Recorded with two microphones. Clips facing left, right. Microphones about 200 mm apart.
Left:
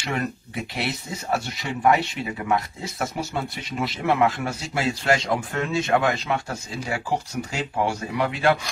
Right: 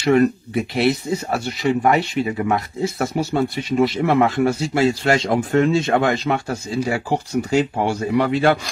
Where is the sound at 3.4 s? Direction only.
30° right (ahead or behind).